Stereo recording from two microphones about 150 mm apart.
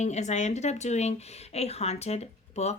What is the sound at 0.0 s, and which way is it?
Speech, 50° left (ahead or behind).